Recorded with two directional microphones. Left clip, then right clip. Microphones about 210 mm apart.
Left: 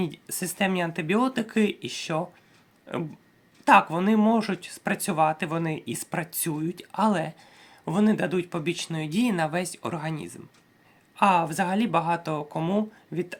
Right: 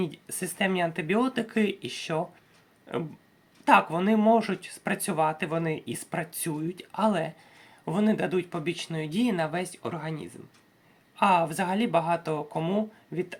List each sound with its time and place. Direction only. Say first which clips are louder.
0.0 s speech: left 1 dB; 20° left (ahead or behind)